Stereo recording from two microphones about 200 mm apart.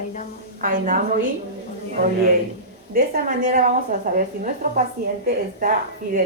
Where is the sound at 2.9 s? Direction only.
45° right (ahead or behind).